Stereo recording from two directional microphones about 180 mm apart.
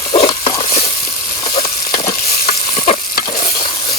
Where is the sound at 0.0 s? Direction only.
35° left (ahead or behind).